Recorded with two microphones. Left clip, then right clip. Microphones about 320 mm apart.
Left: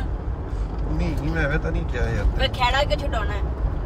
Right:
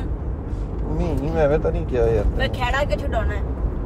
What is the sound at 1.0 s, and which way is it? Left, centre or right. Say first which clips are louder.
A man's voice: right 6 dB; centre.